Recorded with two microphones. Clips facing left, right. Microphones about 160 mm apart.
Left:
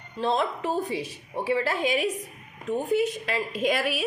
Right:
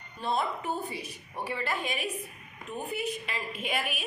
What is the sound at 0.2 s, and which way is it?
A woman's voice, 90° left.